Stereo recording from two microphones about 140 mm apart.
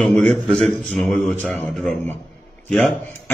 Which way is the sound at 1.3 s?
15° left (ahead or behind).